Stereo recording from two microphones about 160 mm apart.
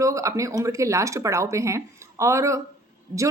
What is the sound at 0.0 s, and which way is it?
A woman's voice, 20° right (ahead or behind).